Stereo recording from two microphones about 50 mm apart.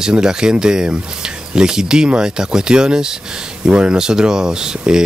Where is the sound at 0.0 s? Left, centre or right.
Centre.